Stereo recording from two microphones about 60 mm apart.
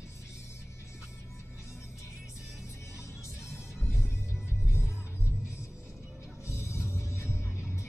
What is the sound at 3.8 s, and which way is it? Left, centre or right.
Music, left.